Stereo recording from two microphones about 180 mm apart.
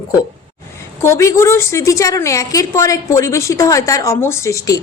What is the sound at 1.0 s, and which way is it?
Speech, 15° left (ahead or behind).